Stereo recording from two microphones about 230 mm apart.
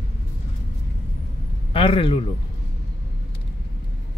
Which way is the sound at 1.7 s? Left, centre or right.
Left.